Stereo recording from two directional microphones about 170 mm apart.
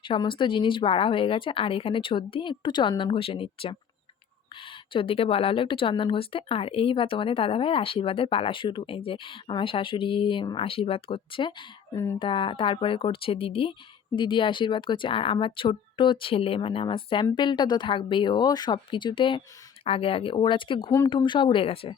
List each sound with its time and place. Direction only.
0.0 s a woman's voice: 30° left (ahead or behind)